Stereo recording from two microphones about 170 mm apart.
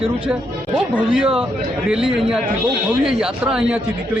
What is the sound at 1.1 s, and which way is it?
A man's voice, 5° right (ahead or behind).